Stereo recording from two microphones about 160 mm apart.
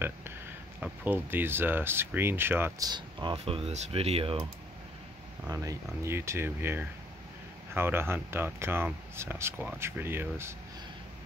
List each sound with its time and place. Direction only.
0.7 s speech: 10° right (ahead or behind)
2.9 s speech: 30° right (ahead or behind)
5.5 s speech: 20° right (ahead or behind)